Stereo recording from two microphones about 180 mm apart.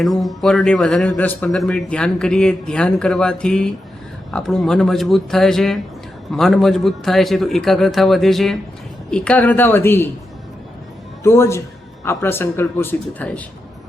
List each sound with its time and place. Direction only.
0.0 s a man's voice: centre (ahead or behind)
11.2 s a man's voice: 15° left (ahead or behind)